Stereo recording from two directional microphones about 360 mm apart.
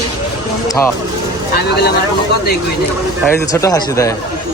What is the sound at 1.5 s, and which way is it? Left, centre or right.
Speech, left.